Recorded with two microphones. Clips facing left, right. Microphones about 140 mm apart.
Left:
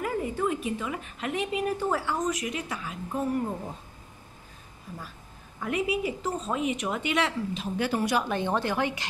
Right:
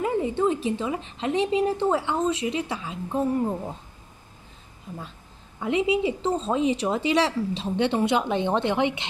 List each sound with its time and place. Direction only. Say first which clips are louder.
0.0 s a woman's voice: right 5 dB; 25° right (ahead or behind)
4.9 s a woman's voice: right 4 dB; 25° right (ahead or behind)